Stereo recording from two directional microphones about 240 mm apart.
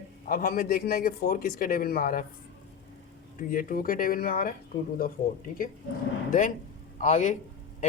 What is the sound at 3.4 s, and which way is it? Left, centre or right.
A man's voice, left.